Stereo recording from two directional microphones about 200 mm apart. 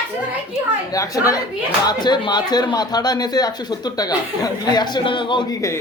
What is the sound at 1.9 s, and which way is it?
Speech, 20° left (ahead or behind).